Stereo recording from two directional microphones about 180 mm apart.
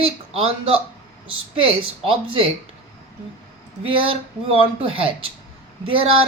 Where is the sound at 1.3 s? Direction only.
30° right (ahead or behind).